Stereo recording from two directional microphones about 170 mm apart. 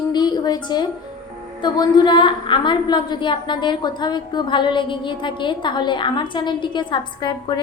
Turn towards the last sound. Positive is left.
turn(degrees=25)  # may be behind; listen again after turning